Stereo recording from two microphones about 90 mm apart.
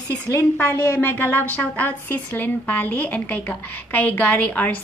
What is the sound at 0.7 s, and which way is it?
Speech, 35° left (ahead or behind).